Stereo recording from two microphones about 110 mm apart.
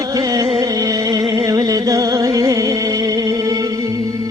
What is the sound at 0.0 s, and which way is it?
Music, 35° right (ahead or behind).